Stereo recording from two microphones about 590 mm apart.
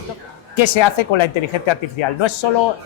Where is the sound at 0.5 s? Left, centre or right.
Left.